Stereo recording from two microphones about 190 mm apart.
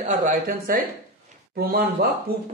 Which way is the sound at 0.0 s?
40° right (ahead or behind).